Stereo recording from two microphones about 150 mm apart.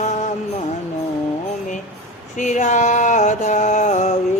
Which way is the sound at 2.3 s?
55° left (ahead or behind).